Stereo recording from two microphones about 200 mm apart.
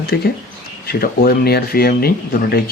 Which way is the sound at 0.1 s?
55° left (ahead or behind).